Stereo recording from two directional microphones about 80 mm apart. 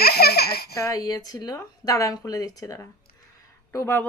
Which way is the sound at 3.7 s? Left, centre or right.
Left.